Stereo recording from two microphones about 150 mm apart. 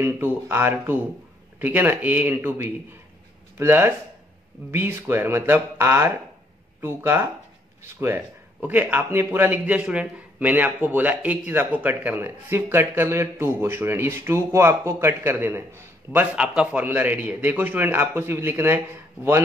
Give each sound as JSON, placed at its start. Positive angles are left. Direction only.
{"t": 0.0, "sound": "a man's voice", "side_deg": -15}